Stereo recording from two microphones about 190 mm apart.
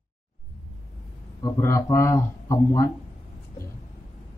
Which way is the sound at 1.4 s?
15° left (ahead or behind).